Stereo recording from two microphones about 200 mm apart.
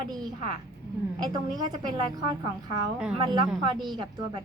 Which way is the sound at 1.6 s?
20° right (ahead or behind).